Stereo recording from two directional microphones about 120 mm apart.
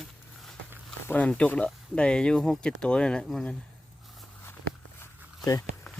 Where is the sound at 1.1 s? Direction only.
10° left (ahead or behind).